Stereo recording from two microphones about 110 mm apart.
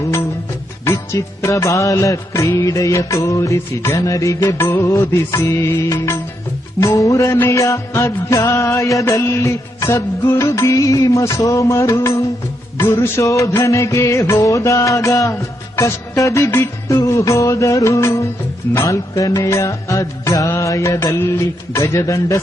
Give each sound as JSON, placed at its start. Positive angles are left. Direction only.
{"t": 0.9, "sound": "music", "side_deg": 25}